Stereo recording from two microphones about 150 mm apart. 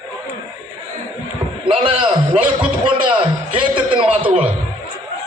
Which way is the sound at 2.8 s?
35° right (ahead or behind).